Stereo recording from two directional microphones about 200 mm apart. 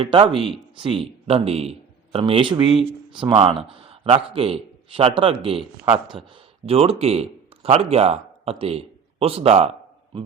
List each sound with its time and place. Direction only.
0.0 s speech: 25° right (ahead or behind)
5.8 s speech: 5° right (ahead or behind)
6.7 s a man's voice: 30° right (ahead or behind)